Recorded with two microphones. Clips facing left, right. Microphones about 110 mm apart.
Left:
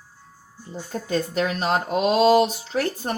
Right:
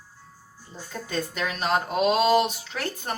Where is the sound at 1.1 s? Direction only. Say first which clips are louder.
Left 6 dB; 35° left (ahead or behind).